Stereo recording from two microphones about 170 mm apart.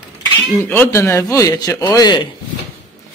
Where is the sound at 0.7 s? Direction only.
15° left (ahead or behind).